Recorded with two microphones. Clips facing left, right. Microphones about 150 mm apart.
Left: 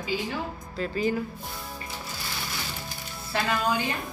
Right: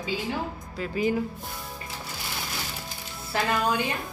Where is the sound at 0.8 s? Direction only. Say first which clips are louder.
Right 1 dB; 15° right (ahead or behind).